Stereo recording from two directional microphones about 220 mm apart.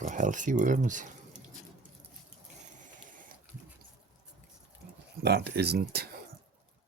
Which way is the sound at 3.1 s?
40° right (ahead or behind).